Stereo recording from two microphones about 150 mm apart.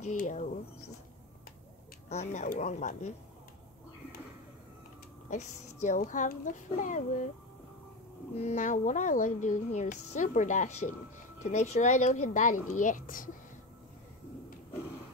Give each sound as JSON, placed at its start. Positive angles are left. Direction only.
{"t": 0.1, "sound": "speech", "side_deg": 55}
{"t": 2.0, "sound": "speech", "side_deg": 50}
{"t": 5.3, "sound": "speech", "side_deg": 55}
{"t": 8.4, "sound": "a woman's voice", "side_deg": 50}